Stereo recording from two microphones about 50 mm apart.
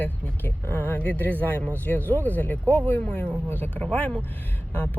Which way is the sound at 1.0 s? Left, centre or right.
Left.